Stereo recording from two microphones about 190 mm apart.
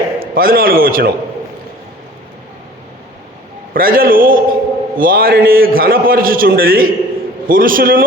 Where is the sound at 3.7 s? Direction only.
50° right (ahead or behind).